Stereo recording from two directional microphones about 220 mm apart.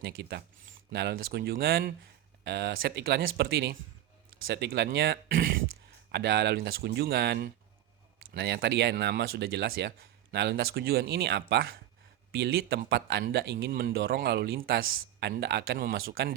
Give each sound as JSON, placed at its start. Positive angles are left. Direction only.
{"t": 0.0, "sound": "speech", "side_deg": -50}